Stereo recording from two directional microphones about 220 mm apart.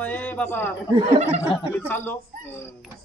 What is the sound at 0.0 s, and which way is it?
Speech, 10° left (ahead or behind).